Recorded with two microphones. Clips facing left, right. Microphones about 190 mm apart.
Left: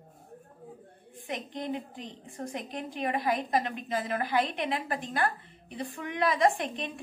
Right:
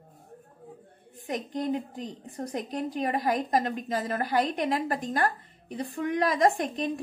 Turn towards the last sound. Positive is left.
turn(degrees=-40)  # may be behind; listen again after turning